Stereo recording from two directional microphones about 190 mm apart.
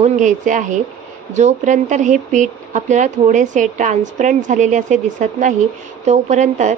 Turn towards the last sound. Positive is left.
turn(degrees=-40)  # may be behind; listen again after turning